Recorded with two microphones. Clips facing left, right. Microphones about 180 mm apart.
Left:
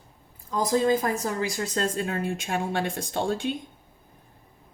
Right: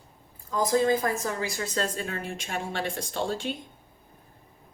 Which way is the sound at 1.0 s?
45° left (ahead or behind).